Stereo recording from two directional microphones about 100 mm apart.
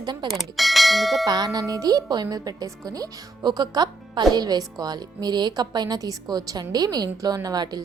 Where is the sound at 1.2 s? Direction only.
40° right (ahead or behind).